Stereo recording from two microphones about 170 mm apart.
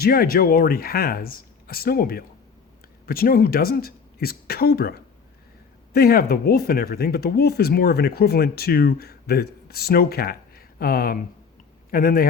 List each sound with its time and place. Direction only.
0.0 s speech: 60° left (ahead or behind)